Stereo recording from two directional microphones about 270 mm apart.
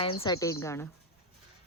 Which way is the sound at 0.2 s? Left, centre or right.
Centre.